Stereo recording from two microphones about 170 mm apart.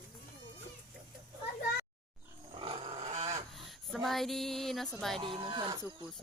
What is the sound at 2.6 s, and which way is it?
Roaring cats, 30° right (ahead or behind).